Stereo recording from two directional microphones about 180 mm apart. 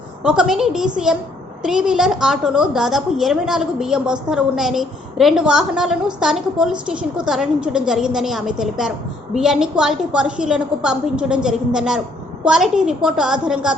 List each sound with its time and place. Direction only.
0.2 s a woman's voice: 5° right (ahead or behind)